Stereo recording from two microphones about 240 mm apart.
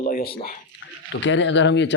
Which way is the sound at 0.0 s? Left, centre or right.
Left.